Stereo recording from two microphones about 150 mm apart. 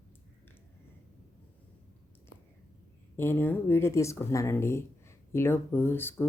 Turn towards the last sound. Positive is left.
turn(degrees=15)  # may be behind; listen again after turning